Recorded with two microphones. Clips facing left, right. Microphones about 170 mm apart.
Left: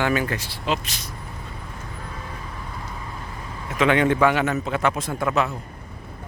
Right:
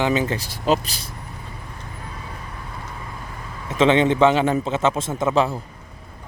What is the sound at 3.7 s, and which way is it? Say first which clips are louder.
A man's voice: right 3 dB; 25° right (ahead or behind).